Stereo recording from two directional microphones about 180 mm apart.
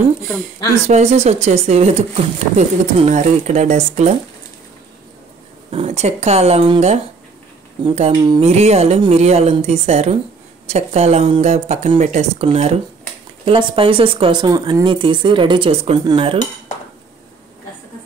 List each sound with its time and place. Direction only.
0.8 s speech: 40° right (ahead or behind)
5.7 s speech: 35° right (ahead or behind)